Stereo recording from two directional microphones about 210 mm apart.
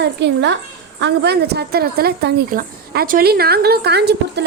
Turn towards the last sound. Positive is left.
turn(degrees=-50)  # may be behind; listen again after turning